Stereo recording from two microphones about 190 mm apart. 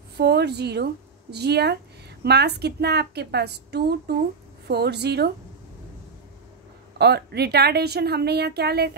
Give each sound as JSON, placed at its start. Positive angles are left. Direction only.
{"t": 0.2, "sound": "a woman's voice", "side_deg": -60}
{"t": 7.0, "sound": "a woman's voice", "side_deg": -60}